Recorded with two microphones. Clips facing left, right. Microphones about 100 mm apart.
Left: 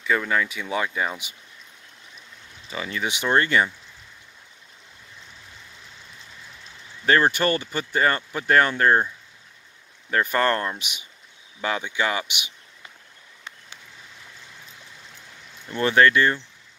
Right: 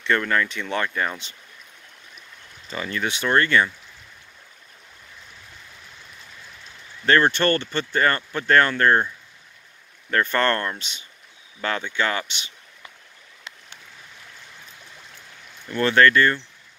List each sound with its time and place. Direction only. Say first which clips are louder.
0.0 s speech: right 1 dB; 5° left (ahead or behind)
2.7 s speech: right 1 dB; 10° left (ahead or behind)
7.1 s speech: right 1 dB; 10° left (ahead or behind)
10.1 s speech: even; 10° left (ahead or behind)
15.7 s speech: right 1 dB; 15° left (ahead or behind)